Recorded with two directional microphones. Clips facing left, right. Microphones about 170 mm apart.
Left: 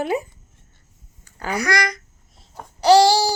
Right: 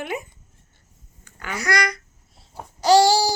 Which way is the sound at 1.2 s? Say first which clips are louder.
Left 6 dB; 40° left (ahead or behind).